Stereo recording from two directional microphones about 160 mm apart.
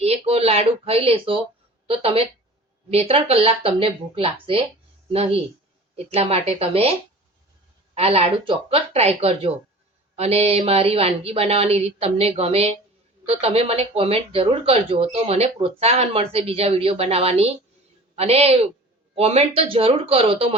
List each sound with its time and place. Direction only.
0.0 s speech: 40° right (ahead or behind)
7.9 s speech: 40° right (ahead or behind)